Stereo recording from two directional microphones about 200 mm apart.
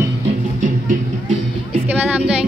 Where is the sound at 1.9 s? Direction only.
10° right (ahead or behind).